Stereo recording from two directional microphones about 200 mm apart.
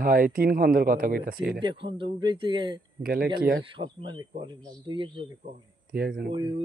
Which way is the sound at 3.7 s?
25° right (ahead or behind).